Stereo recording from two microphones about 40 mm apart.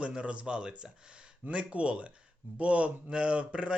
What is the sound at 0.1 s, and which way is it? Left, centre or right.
Speech, right.